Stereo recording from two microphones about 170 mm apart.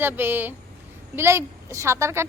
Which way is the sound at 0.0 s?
10° right (ahead or behind).